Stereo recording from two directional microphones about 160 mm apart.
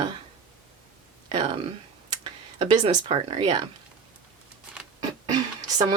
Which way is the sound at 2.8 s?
30° right (ahead or behind).